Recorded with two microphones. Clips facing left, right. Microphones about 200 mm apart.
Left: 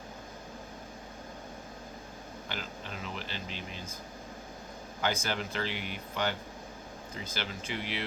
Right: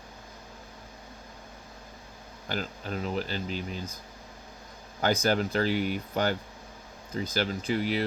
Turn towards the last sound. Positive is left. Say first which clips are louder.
# right 9 dB
turn(degrees=-40)  # may be behind; listen again after turning